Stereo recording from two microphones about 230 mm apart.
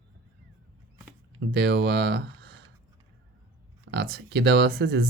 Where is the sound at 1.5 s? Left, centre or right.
Right.